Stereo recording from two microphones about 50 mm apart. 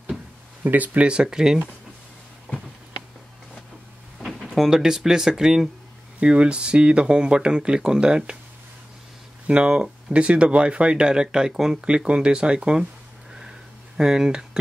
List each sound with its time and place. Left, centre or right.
0.7 s speech: right
1.0 s speech: centre
4.2 s a sound: centre
4.5 s speech: centre
6.1 s speech: right
9.5 s speech: centre
13.9 s speech: centre